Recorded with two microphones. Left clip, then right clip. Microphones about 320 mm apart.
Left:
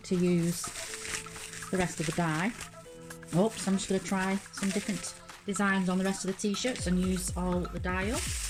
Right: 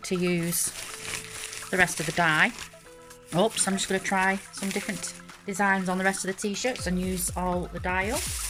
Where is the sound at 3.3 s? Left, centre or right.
Right.